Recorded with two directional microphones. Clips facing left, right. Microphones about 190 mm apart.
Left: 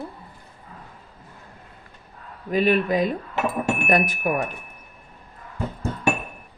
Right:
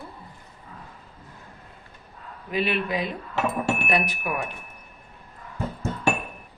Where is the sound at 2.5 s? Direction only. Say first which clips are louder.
Left 6 dB; 45° left (ahead or behind).